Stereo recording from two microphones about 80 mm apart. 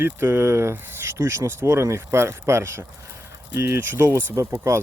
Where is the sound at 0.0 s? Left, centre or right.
Right.